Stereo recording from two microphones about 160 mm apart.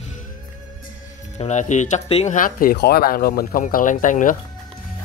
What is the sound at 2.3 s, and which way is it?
Speech, 60° left (ahead or behind).